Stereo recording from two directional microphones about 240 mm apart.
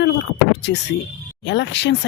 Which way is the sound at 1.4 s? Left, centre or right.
Left.